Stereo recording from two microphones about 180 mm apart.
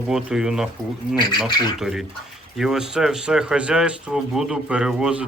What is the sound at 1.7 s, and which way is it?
Speech, centre (ahead or behind).